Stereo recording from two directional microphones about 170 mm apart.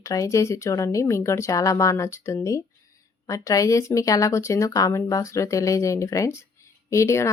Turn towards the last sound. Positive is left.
turn(degrees=15)  # may be behind; listen again after turning